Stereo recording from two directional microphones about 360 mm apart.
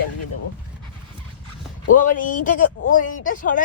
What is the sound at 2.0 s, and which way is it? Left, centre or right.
Speech, left.